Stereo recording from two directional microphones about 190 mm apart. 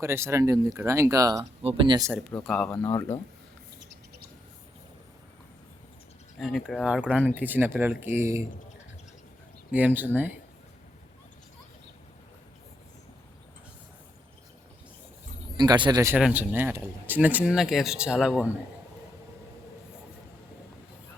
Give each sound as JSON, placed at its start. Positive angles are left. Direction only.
{"t": 0.0, "sound": "speech", "side_deg": -15}
{"t": 2.0, "sound": "speech", "side_deg": 5}
{"t": 6.4, "sound": "speech", "side_deg": 0}
{"t": 9.7, "sound": "speech", "side_deg": -10}
{"t": 15.5, "sound": "speech", "side_deg": -20}